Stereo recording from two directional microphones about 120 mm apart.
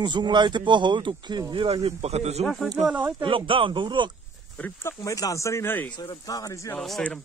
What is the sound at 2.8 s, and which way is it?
Speech, 10° right (ahead or behind).